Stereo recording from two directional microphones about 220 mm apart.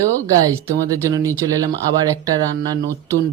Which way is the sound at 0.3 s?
15° right (ahead or behind).